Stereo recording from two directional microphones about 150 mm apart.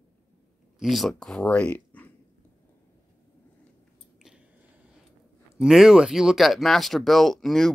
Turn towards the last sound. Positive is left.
turn(degrees=5)  # may be behind; listen again after turning